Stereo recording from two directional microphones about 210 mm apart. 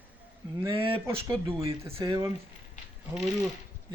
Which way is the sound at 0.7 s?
25° right (ahead or behind).